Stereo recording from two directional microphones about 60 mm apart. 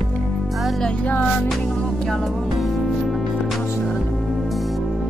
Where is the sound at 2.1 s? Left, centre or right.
Centre.